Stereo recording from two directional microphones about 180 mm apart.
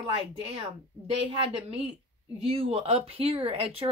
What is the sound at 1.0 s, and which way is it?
A woman's voice, 30° right (ahead or behind).